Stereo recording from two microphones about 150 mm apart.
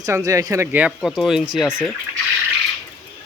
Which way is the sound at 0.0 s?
20° right (ahead or behind).